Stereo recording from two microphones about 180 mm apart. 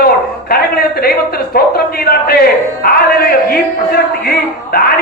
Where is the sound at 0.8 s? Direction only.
60° left (ahead or behind).